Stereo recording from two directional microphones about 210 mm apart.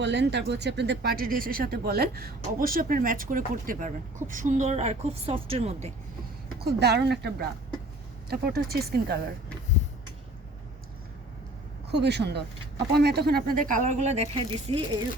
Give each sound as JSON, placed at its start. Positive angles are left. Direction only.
{"t": 0.0, "sound": "a woman's voice", "side_deg": -55}
{"t": 6.6, "sound": "speech", "side_deg": -50}
{"t": 11.9, "sound": "a woman's voice", "side_deg": -55}